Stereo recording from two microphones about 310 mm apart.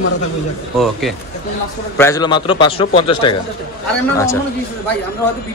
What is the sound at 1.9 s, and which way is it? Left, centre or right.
A man's voice, centre.